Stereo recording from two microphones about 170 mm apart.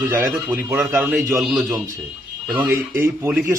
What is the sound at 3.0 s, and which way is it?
Speech, 15° right (ahead or behind).